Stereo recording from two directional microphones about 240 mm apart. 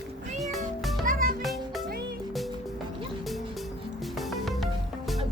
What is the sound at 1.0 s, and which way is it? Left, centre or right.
Music, right.